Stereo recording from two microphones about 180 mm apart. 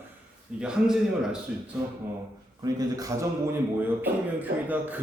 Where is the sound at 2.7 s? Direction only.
20° right (ahead or behind).